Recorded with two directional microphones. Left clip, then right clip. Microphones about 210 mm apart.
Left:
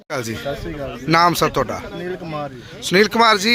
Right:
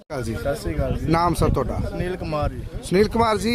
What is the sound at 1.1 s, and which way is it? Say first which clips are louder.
Speech: left 6 dB; centre (ahead or behind).